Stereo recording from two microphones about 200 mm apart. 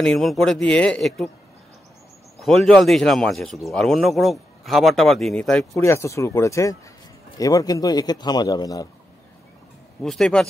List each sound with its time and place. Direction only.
0.0 s speech: centre (ahead or behind)
2.4 s a man's voice: centre (ahead or behind)
10.0 s speech: centre (ahead or behind)